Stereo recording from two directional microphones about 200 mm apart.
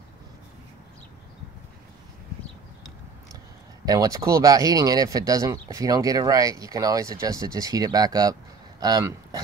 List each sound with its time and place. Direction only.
3.8 s speech: 15° right (ahead or behind)